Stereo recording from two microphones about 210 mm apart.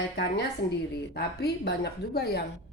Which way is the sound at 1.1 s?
50° left (ahead or behind).